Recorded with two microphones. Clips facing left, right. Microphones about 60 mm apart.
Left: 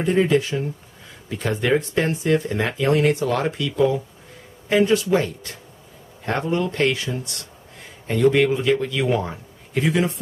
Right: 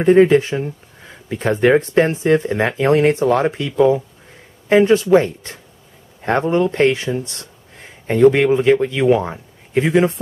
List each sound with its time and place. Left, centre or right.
0.0 s speech: right